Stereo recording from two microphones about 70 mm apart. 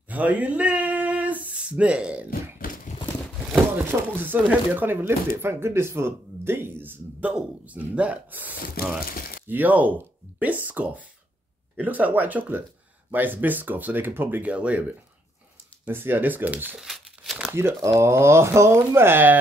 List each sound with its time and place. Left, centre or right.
0.1 s a sound: right
4.1 s speech: right
15.9 s speech: right
16.7 s crumpling: centre
17.6 s speech: right
18.9 s speech: right